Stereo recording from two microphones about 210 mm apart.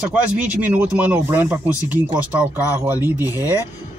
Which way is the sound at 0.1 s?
5° right (ahead or behind).